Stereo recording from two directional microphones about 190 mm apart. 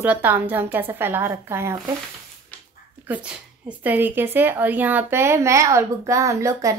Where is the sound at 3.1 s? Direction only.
10° right (ahead or behind).